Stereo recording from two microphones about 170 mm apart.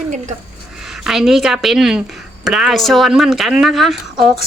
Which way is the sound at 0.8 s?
5° right (ahead or behind).